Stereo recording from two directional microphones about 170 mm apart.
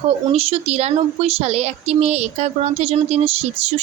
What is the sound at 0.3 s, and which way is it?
Speech, 35° right (ahead or behind).